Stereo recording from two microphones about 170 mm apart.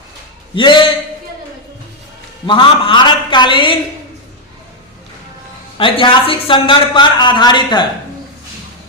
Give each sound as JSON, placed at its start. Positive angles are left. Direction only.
{"t": 0.5, "sound": "a man's voice", "side_deg": 25}
{"t": 2.5, "sound": "speech", "side_deg": 30}
{"t": 5.7, "sound": "a man's voice", "side_deg": 30}